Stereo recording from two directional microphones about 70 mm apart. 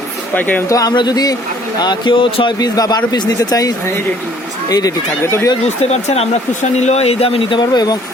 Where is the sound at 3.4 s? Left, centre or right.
Left.